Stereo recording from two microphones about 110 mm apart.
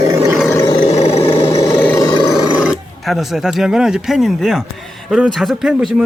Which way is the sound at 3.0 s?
Centre (ahead or behind).